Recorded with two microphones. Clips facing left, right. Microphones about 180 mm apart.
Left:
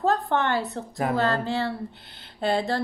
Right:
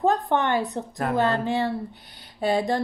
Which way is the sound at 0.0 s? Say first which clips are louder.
Right 1 dB; 15° right (ahead or behind).